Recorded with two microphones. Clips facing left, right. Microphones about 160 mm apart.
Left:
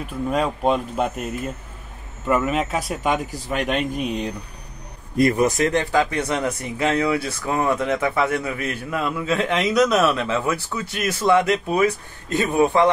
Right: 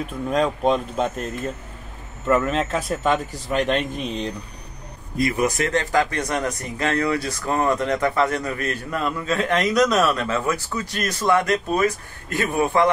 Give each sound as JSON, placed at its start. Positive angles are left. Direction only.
{"t": 0.3, "sound": "speech", "side_deg": 5}
{"t": 5.4, "sound": "speech", "side_deg": 15}